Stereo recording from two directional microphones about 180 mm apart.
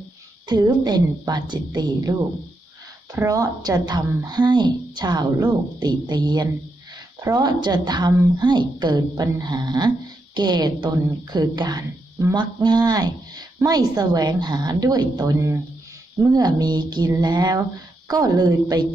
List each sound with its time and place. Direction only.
0.5 s speech: 25° right (ahead or behind)
3.2 s speech: 20° right (ahead or behind)